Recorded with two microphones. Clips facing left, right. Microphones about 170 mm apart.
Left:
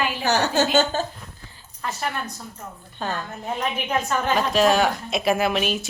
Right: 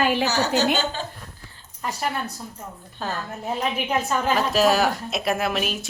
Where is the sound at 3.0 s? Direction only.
Centre (ahead or behind).